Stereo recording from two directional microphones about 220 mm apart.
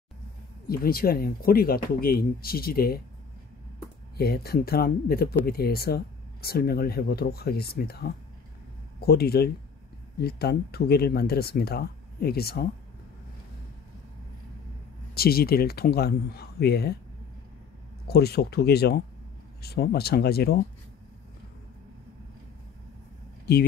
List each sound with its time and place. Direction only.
0.7 s speech: 40° left (ahead or behind)
4.2 s speech: 45° left (ahead or behind)
15.1 s speech: 45° left (ahead or behind)
18.0 s speech: 45° left (ahead or behind)
23.5 s speech: 45° left (ahead or behind)